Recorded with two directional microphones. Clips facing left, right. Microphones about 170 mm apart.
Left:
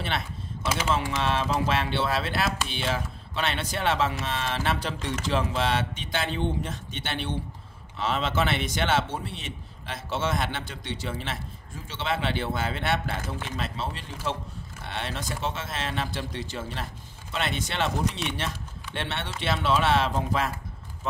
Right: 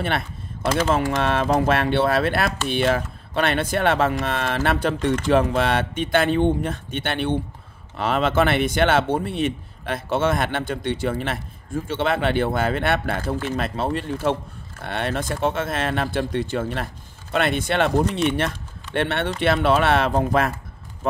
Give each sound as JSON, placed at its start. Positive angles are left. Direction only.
{"t": 0.0, "sound": "speech", "side_deg": -55}